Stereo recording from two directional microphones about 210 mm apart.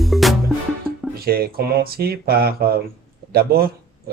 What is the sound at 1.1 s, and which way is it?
Speech, 45° right (ahead or behind).